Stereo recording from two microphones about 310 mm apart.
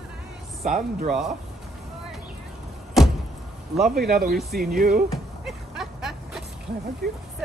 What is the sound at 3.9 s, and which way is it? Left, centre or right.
Speech, right.